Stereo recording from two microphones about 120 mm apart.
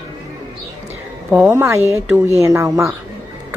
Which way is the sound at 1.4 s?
20° right (ahead or behind).